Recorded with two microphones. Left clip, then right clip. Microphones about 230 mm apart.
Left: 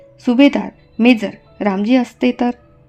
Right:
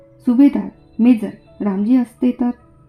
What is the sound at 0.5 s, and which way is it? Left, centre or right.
Speech, left.